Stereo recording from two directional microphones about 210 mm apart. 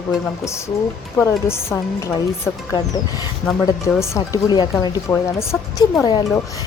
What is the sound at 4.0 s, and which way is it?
A woman's voice, 15° left (ahead or behind).